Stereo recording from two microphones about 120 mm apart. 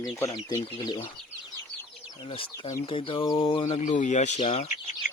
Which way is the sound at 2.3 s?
50° left (ahead or behind).